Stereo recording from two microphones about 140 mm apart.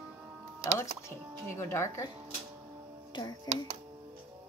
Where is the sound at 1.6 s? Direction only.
20° left (ahead or behind).